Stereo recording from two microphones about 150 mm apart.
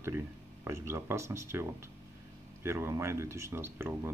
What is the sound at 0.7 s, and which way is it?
Speech, 15° right (ahead or behind).